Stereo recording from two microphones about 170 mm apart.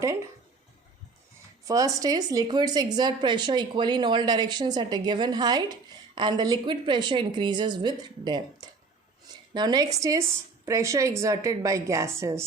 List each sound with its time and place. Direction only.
1.6 s a woman's voice: 20° right (ahead or behind)